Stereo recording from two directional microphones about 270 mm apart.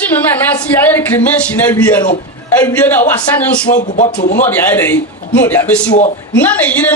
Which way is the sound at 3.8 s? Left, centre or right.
Left.